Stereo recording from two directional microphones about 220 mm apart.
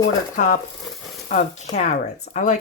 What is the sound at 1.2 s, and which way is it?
Speech, 35° left (ahead or behind).